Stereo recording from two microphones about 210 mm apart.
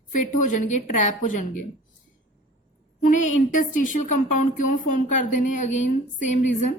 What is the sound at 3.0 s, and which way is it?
A woman's voice, 35° left (ahead or behind).